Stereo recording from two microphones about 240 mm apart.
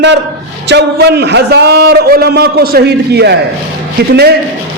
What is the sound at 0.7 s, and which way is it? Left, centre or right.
A man's voice, right.